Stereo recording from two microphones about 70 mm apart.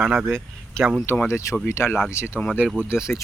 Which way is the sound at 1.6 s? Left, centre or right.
Left.